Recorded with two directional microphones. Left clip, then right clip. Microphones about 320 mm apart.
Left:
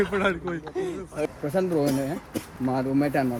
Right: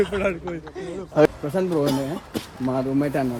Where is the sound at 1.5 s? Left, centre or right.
Centre.